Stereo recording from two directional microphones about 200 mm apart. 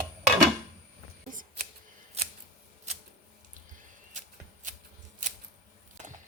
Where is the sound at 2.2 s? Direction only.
30° right (ahead or behind).